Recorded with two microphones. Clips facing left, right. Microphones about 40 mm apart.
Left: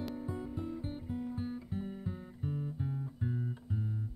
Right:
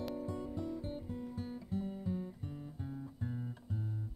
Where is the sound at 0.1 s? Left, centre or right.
Left.